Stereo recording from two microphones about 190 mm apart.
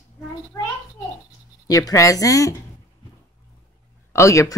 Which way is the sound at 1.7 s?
20° left (ahead or behind).